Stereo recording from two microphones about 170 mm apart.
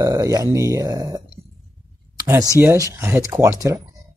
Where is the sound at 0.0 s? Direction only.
20° right (ahead or behind).